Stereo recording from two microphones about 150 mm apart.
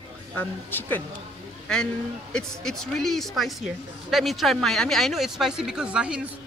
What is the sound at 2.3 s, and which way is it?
Speech, 5° left (ahead or behind).